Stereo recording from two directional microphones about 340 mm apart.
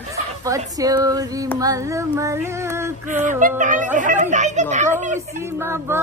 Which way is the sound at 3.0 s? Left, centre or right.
Right.